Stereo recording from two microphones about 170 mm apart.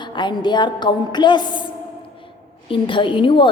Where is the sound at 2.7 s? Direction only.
30° left (ahead or behind).